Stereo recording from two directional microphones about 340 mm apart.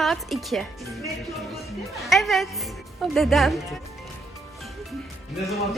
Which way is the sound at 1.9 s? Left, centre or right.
Centre.